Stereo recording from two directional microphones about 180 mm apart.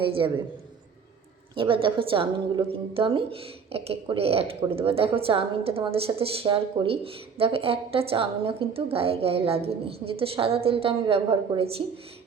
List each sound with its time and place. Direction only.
0.0 s a man's voice: 30° right (ahead or behind)
1.5 s a woman's voice: 30° right (ahead or behind)